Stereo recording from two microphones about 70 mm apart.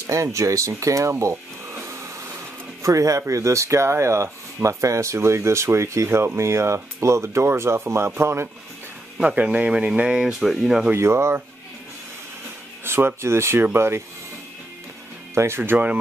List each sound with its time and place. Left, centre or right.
0.0 s speech: right
1.3 s a sound: right
2.8 s speech: right
9.2 s speech: centre
10.9 s speech: right
12.8 s speech: right
15.3 s speech: right